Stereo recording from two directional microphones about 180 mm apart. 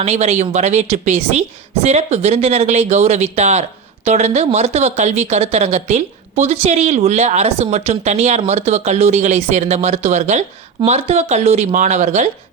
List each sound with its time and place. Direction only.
0.0 s a woman's voice: 40° right (ahead or behind)